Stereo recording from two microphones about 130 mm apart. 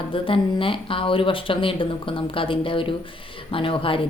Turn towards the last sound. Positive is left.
turn(degrees=45)  # may be behind; listen again after turning